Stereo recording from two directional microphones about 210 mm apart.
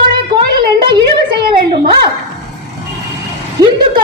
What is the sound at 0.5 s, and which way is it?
Speech, 20° right (ahead or behind).